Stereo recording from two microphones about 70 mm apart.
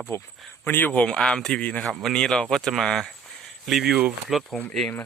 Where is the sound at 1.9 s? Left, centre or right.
Centre.